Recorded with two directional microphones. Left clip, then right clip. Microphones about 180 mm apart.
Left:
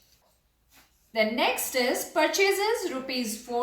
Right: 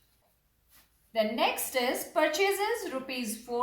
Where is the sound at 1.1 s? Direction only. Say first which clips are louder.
Left 3 dB; 25° right (ahead or behind).